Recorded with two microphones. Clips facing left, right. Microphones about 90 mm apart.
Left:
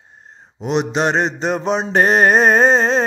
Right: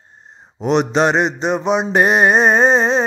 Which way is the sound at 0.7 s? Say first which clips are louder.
Right 3 dB; 35° right (ahead or behind).